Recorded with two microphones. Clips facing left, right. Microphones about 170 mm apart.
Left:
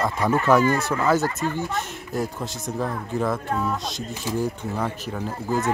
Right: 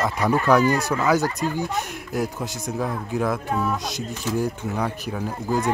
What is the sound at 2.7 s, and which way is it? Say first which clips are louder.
Speech: right 1 dB; centre (ahead or behind).